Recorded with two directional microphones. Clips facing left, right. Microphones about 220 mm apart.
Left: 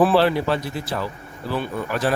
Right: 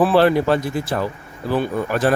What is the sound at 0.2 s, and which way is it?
Speech, 50° right (ahead or behind).